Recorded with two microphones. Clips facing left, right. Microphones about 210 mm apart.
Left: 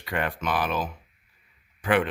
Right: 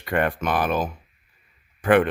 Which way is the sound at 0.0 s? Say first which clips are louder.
Right 6 dB; 50° right (ahead or behind).